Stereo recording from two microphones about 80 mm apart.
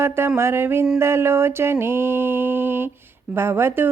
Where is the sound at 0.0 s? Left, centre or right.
Right.